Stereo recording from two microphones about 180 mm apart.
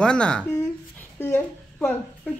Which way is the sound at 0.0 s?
5° left (ahead or behind).